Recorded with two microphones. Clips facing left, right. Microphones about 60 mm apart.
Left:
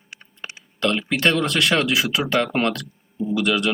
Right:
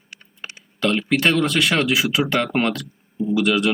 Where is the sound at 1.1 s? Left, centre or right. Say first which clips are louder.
Right 2 dB; centre.